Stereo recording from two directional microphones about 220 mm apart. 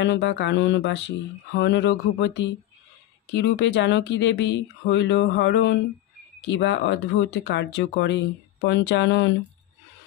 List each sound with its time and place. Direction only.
0.0 s speech: 50° left (ahead or behind)